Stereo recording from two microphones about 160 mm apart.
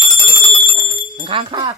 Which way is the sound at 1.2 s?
35° right (ahead or behind).